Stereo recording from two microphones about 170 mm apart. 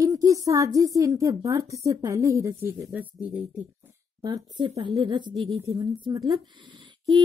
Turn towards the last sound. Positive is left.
turn(degrees=-30)  # may be behind; listen again after turning